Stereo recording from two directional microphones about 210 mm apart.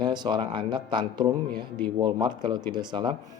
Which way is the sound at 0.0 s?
20° right (ahead or behind).